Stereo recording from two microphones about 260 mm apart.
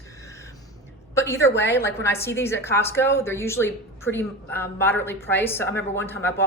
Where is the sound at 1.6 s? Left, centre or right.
Centre.